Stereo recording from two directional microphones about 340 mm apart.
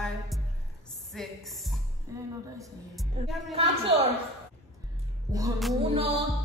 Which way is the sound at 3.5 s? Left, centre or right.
Centre.